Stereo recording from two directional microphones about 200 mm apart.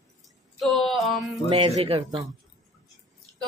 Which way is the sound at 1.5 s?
30° right (ahead or behind).